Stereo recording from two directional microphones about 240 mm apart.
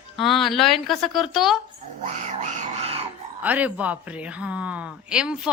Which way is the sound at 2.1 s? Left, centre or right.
Right.